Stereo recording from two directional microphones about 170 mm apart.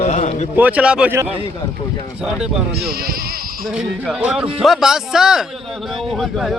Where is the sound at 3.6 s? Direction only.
Centre (ahead or behind).